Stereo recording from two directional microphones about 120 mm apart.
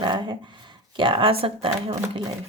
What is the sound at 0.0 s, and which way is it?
Speech, 40° right (ahead or behind).